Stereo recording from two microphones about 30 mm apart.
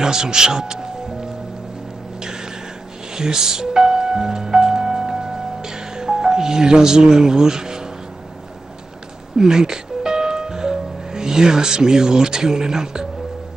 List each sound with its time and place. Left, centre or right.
0.0 s speech: right
3.2 s music: centre
9.4 s music: right